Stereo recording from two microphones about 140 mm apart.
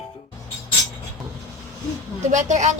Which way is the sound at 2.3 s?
60° right (ahead or behind).